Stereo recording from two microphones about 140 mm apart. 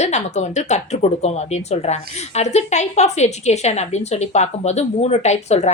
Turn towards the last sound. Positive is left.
turn(degrees=55)  # may be behind; listen again after turning